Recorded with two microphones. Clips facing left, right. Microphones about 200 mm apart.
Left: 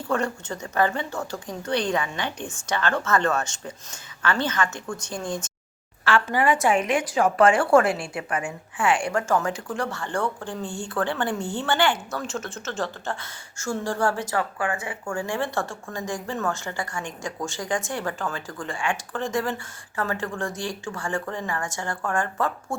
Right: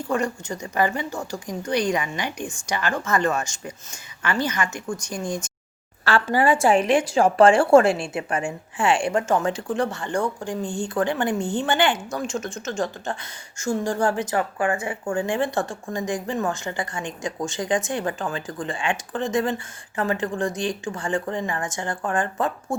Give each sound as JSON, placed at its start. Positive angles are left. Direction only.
{"t": 0.1, "sound": "speech", "side_deg": -10}
{"t": 6.1, "sound": "a woman's voice", "side_deg": -35}